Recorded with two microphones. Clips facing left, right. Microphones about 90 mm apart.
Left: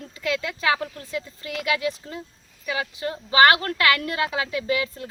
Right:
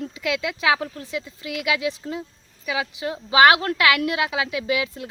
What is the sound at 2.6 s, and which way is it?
A woman's voice, 10° right (ahead or behind).